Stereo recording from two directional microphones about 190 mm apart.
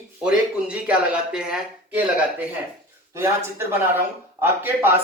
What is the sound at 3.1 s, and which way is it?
Speech, 15° right (ahead or behind).